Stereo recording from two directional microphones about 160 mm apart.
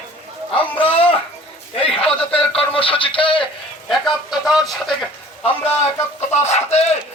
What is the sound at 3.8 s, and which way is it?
A man's voice, centre (ahead or behind).